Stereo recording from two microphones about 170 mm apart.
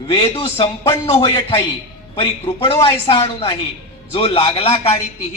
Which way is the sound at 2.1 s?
30° left (ahead or behind).